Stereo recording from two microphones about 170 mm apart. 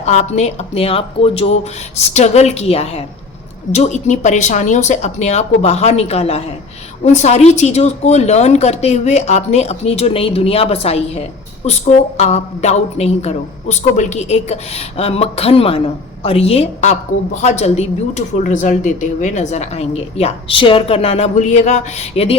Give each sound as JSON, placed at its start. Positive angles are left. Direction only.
{"t": 0.0, "sound": "speech", "side_deg": 40}